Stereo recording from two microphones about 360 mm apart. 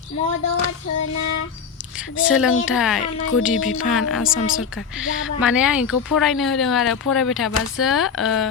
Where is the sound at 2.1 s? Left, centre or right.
Left.